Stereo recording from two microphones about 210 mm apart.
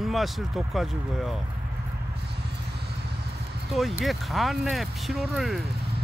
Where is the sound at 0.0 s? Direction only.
Centre (ahead or behind).